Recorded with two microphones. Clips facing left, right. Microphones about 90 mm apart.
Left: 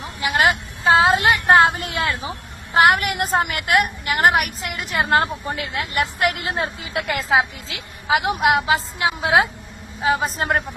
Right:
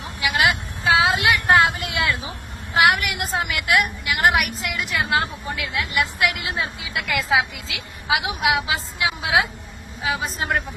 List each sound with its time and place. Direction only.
0.2 s a woman's voice: 40° left (ahead or behind)